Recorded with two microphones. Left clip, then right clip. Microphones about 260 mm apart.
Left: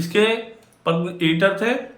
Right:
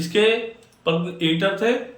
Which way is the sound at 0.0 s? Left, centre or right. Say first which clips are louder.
Even; centre.